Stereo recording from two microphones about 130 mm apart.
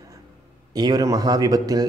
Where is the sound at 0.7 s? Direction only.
30° right (ahead or behind).